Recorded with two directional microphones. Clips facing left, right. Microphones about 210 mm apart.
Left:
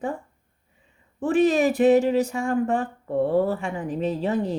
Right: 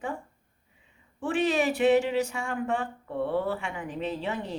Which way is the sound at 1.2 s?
40° left (ahead or behind).